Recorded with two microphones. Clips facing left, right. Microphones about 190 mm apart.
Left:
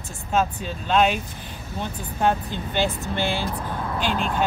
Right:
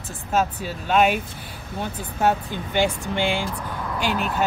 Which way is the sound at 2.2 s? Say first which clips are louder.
Right 1 dB; 10° right (ahead or behind).